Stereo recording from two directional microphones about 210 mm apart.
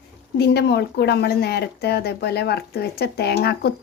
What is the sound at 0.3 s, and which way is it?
A woman's voice, 50° left (ahead or behind).